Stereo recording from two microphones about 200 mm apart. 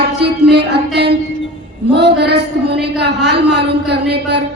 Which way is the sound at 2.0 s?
55° right (ahead or behind).